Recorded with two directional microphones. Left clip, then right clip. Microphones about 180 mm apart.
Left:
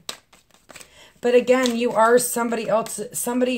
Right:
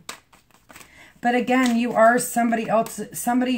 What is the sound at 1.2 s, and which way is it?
Speech, 40° left (ahead or behind).